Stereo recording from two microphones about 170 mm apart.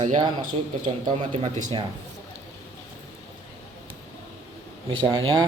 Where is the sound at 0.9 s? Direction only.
30° right (ahead or behind).